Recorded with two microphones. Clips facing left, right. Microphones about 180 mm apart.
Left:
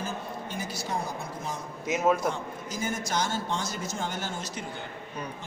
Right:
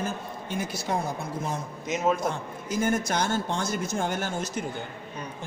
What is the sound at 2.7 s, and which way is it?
A man's voice, 55° right (ahead or behind).